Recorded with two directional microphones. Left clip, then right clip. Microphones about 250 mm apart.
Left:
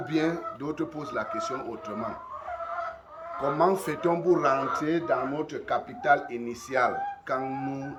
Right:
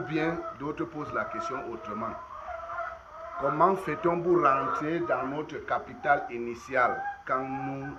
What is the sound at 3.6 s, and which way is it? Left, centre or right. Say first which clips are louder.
A man's voice: even; centre.